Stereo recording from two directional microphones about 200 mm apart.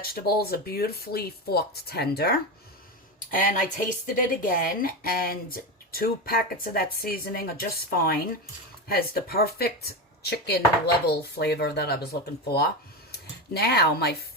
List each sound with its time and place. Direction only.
0.0 s a woman's voice: 50° left (ahead or behind)